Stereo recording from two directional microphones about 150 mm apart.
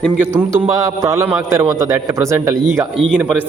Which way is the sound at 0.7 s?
20° right (ahead or behind).